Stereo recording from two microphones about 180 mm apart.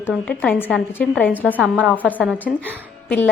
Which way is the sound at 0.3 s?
5° left (ahead or behind).